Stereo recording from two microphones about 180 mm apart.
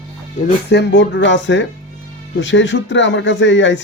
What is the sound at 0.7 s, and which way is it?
Speech, 80° left.